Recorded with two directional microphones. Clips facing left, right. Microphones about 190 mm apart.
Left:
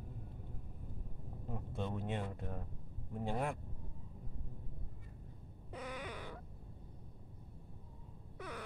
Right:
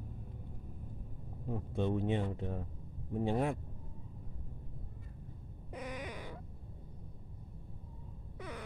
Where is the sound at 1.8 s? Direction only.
20° right (ahead or behind).